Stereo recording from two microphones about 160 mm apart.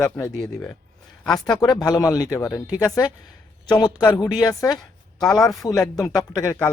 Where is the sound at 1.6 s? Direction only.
25° left (ahead or behind).